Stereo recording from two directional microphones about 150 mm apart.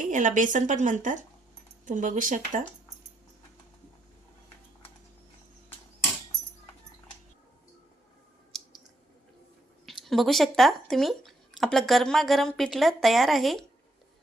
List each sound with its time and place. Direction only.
0.0 s a woman's voice: 60° right (ahead or behind)
8.5 s clicking: centre (ahead or behind)
9.8 s speech: centre (ahead or behind)